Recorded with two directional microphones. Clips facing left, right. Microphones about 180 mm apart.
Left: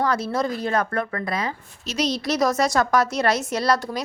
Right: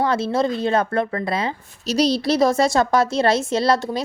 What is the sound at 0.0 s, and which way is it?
A woman's voice, 25° right (ahead or behind).